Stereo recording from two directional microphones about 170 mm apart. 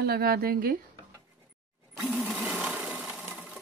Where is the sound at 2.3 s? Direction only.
5° right (ahead or behind).